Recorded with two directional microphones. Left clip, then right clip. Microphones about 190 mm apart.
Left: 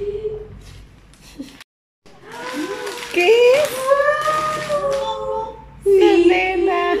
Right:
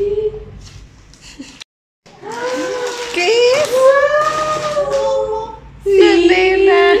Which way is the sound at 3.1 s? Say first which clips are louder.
Even; 10° left (ahead or behind).